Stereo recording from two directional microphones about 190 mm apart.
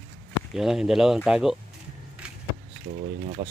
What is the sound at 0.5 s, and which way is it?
Speech, centre (ahead or behind).